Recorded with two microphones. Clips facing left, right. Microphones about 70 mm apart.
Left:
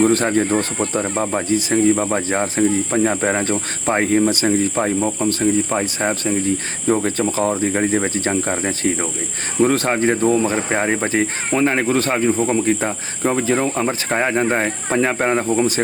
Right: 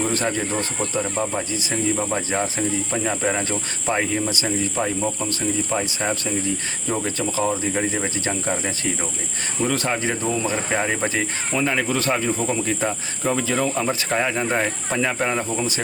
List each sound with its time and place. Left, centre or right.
0.0 s speech: left
0.3 s speech: left
9.6 s speech: left